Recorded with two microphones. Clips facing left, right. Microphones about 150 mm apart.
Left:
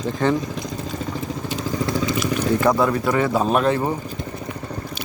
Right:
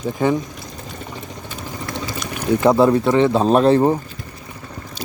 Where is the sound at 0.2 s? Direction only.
10° right (ahead or behind).